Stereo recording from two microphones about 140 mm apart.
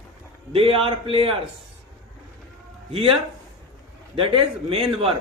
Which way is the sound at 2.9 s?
40° right (ahead or behind).